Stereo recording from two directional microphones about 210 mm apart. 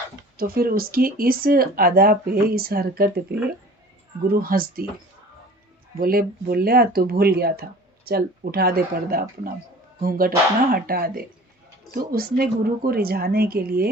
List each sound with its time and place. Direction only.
0.3 s speech: 45° right (ahead or behind)
6.0 s speech: 45° right (ahead or behind)